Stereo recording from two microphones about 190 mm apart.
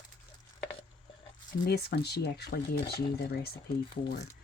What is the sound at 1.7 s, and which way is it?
Speech, 55° left (ahead or behind).